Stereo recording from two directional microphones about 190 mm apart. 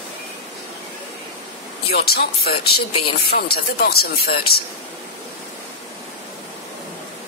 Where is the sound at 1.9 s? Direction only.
55° left (ahead or behind).